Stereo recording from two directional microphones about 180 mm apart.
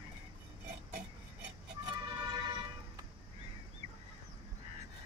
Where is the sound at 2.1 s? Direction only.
25° right (ahead or behind).